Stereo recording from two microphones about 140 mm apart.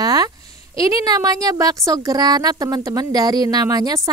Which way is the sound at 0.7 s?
25° right (ahead or behind).